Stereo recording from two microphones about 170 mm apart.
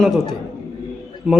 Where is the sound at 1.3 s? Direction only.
5° right (ahead or behind).